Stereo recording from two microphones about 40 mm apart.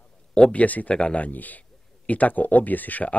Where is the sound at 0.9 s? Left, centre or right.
Left.